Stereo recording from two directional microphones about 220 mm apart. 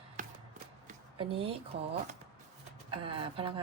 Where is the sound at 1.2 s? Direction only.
25° right (ahead or behind).